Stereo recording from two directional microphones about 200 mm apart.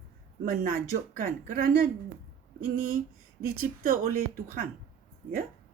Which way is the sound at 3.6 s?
45° right (ahead or behind).